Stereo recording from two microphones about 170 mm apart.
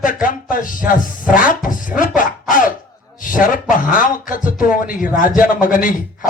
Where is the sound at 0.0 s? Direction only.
50° left (ahead or behind).